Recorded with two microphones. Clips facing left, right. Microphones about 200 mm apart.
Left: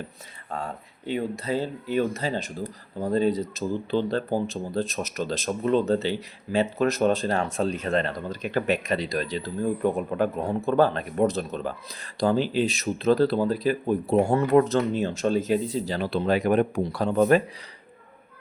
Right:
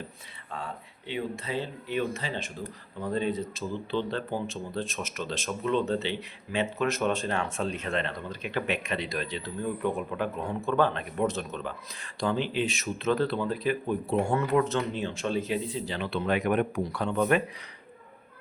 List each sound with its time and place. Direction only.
0.5 s speech: 45° left (ahead or behind)